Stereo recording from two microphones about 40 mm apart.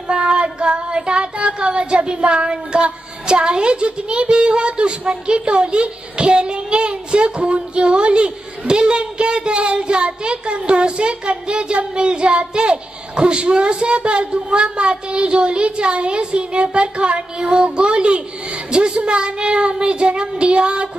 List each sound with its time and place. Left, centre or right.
0.1 s child singing: right